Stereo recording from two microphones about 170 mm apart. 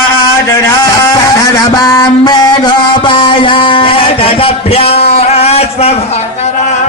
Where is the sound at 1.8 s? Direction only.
20° left (ahead or behind); by 6.2 s 40° left (ahead or behind).